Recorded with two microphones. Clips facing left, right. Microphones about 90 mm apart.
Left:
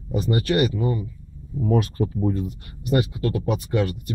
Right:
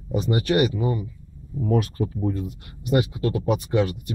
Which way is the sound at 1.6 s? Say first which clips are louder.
Left 1 dB; centre (ahead or behind).